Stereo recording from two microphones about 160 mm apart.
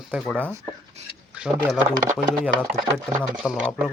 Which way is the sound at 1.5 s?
15° right (ahead or behind).